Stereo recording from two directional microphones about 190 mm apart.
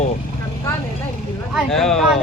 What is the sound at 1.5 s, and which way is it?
Speech, centre (ahead or behind).